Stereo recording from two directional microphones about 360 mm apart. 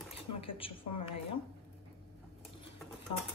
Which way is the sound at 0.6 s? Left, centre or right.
Centre.